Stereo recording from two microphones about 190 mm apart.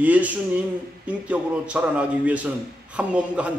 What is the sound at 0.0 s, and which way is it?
A man's voice, 10° right (ahead or behind).